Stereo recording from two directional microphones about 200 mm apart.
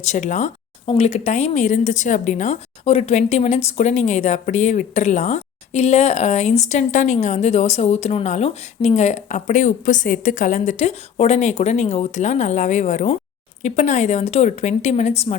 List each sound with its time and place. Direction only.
0.0 s speech: 35° left (ahead or behind)